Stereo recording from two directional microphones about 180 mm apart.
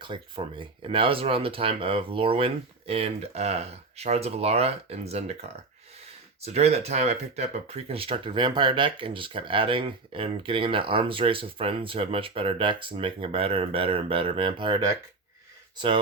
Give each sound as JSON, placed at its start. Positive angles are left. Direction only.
{"t": 0.0, "sound": "speech", "side_deg": -25}